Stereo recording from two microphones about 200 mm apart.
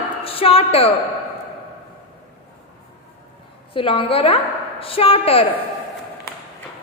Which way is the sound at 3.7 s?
25° left (ahead or behind).